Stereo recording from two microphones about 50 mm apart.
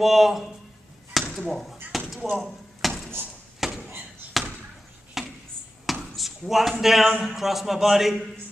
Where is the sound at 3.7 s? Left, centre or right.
Right.